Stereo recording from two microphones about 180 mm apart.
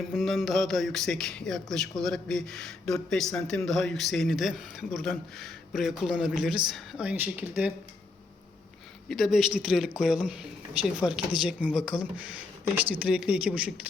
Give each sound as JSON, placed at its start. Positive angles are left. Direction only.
{"t": 0.1, "sound": "a man's voice", "side_deg": 0}
{"t": 9.0, "sound": "a man's voice", "side_deg": 0}